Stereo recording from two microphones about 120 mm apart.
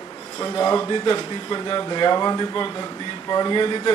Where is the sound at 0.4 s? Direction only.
30° left (ahead or behind).